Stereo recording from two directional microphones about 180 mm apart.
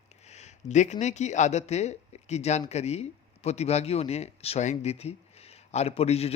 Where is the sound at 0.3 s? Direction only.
40° left (ahead or behind).